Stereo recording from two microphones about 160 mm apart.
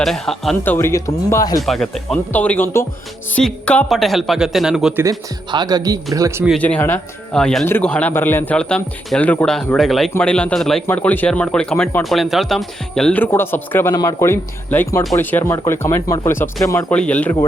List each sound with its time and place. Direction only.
0.0 s speech: centre (ahead or behind)
0.6 s speech: 15° left (ahead or behind)
1.6 s speech: centre (ahead or behind)
5.0 s speech: 25° right (ahead or behind)
6.6 s speech: 10° left (ahead or behind)
16.9 s speech: 10° left (ahead or behind)